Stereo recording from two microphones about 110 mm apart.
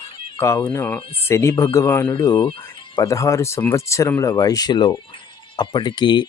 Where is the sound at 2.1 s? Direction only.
45° left (ahead or behind).